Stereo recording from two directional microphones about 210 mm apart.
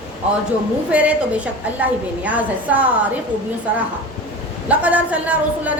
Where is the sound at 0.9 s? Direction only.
5° right (ahead or behind).